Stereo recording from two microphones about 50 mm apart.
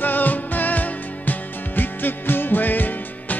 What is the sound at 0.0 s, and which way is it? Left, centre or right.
Music, left.